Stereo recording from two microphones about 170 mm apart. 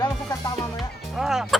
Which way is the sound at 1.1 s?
Centre (ahead or behind).